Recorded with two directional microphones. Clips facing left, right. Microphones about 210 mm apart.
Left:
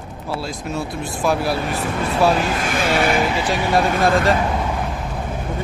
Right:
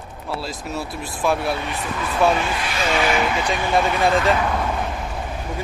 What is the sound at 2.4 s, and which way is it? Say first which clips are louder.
Speech: left 3 dB; 50° left (ahead or behind).